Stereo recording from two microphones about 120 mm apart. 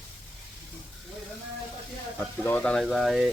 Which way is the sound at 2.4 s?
10° left (ahead or behind).